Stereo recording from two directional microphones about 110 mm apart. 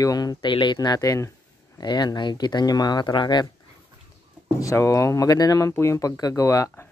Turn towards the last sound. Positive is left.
turn(degrees=25)  # may be behind; listen again after turning